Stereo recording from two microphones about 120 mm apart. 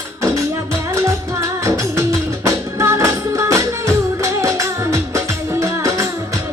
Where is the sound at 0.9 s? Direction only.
25° right (ahead or behind).